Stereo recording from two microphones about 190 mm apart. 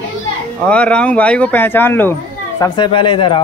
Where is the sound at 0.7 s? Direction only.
5° left (ahead or behind).